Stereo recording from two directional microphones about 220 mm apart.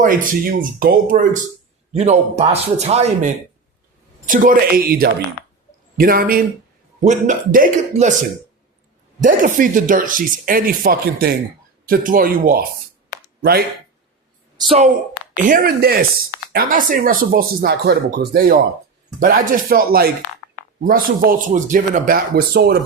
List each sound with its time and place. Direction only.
0.0 s a man's voice: 40° right (ahead or behind)
4.3 s speech: 40° right (ahead or behind)
9.2 s speech: 35° right (ahead or behind)
14.6 s a woman's voice: 25° right (ahead or behind)
15.4 s speech: 40° right (ahead or behind)